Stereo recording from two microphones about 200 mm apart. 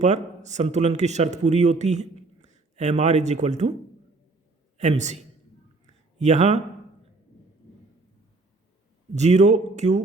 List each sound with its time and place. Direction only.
0.0 s speech: 35° right (ahead or behind)
4.8 s speech: 35° right (ahead or behind)
5.8 s a sound: 35° right (ahead or behind)
9.1 s speech: 35° right (ahead or behind)